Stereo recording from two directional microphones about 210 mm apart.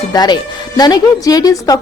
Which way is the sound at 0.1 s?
20° left (ahead or behind).